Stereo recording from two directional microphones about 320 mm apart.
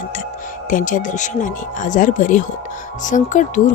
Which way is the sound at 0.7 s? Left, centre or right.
Left.